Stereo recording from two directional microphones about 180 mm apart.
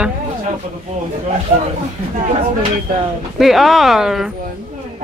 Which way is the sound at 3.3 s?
Centre (ahead or behind).